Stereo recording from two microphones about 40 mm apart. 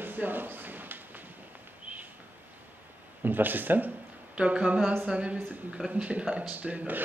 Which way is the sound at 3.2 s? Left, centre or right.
Right.